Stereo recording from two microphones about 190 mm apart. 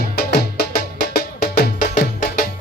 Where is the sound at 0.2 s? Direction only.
55° left (ahead or behind).